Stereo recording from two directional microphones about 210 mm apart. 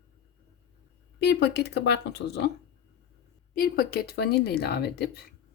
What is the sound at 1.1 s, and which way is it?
Speech, 55° left (ahead or behind).